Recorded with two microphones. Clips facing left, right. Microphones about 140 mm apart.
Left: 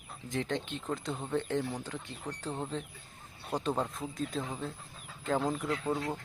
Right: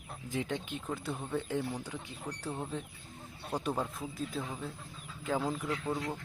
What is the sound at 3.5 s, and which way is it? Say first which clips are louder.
Speech: left 2 dB; 10° left (ahead or behind).